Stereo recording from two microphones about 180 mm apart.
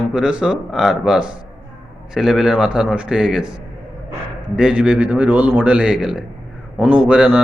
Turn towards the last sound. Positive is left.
turn(degrees=-5)  # may be behind; listen again after turning